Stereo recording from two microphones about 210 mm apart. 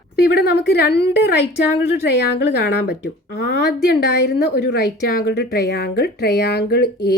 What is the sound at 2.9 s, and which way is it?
A woman's voice, 55° left (ahead or behind).